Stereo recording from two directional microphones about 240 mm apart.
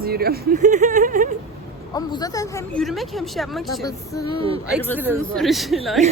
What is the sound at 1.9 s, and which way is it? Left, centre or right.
Speech, centre.